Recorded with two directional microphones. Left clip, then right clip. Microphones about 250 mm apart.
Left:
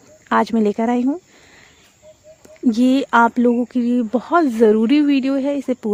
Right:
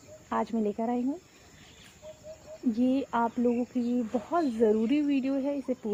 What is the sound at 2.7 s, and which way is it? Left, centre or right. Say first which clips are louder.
Speech: left 14 dB; left.